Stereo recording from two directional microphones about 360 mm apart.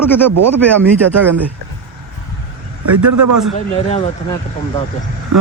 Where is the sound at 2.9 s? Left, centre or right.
Right.